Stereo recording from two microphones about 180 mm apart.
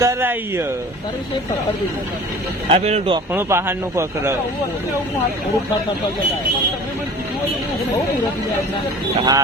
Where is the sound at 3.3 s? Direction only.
15° right (ahead or behind).